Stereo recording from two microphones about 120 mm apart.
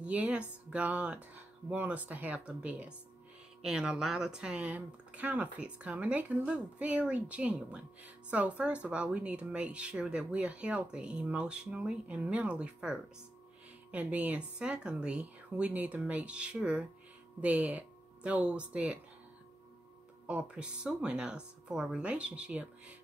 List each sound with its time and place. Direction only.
0.0 s speech: 10° right (ahead or behind)
20.2 s speech: 10° right (ahead or behind)